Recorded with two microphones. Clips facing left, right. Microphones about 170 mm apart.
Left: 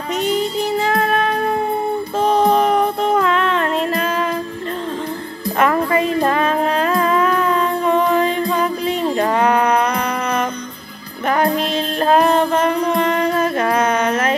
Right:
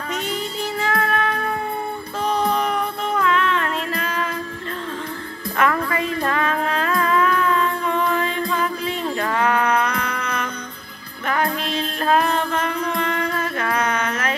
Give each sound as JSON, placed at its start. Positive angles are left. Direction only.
{"t": 0.1, "sound": "music", "side_deg": 20}
{"t": 5.6, "sound": "music", "side_deg": 25}